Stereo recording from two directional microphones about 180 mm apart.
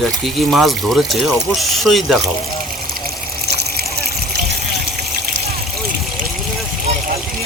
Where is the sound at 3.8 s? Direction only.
60° right (ahead or behind).